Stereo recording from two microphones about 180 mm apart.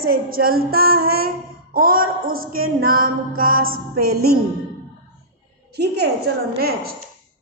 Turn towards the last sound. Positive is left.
turn(degrees=-60)  # may be behind; listen again after turning